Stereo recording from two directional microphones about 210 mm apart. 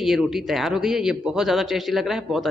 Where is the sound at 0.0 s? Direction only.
Centre (ahead or behind).